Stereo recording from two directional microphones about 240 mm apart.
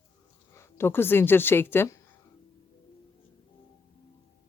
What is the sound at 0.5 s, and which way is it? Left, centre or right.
Speech, centre.